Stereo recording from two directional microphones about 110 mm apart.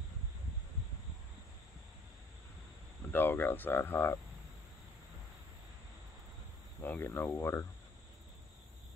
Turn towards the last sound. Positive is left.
turn(degrees=20)  # may be behind; listen again after turning